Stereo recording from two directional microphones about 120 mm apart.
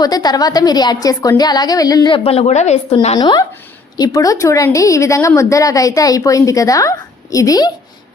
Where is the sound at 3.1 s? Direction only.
35° left (ahead or behind).